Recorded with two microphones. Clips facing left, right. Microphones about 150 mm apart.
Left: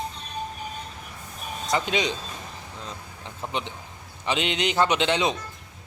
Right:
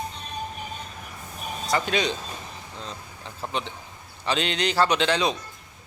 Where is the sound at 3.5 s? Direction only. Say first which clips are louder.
Even; 15° left (ahead or behind).